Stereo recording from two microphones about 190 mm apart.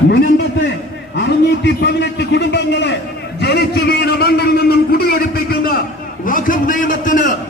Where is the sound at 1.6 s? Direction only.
65° left (ahead or behind).